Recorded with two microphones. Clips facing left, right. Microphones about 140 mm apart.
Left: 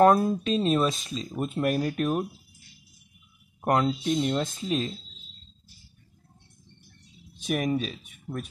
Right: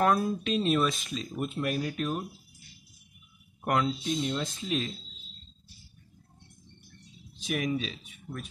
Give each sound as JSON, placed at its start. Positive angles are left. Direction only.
{"t": 0.0, "sound": "speech", "side_deg": 40}
{"t": 3.6, "sound": "speech", "side_deg": 45}
{"t": 4.6, "sound": "speech", "side_deg": 35}
{"t": 7.3, "sound": "speech", "side_deg": 45}